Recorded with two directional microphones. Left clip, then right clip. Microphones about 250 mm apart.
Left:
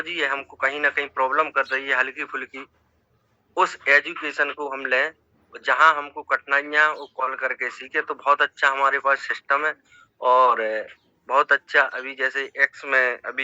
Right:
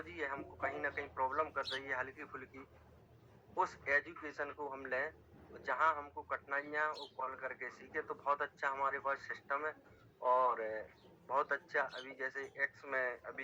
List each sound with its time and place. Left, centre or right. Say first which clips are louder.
0.0 s a man's voice: left 18 dB; left
3.5 s a man's voice: left 17 dB; left
4.4 s a man's voice: left 17 dB; left